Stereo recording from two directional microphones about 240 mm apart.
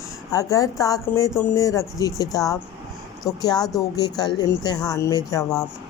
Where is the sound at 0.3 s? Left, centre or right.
Centre.